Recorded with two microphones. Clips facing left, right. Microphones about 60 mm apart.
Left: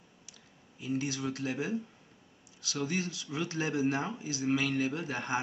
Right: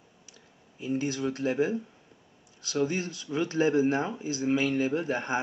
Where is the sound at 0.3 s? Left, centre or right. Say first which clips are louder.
Right 3 dB; right.